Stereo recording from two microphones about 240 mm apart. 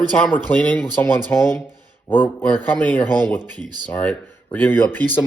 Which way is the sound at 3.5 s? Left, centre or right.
Centre.